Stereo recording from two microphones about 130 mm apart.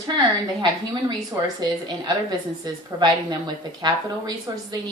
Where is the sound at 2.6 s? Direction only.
35° right (ahead or behind).